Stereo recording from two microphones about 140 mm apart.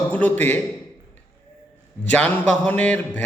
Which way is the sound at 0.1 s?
10° left (ahead or behind).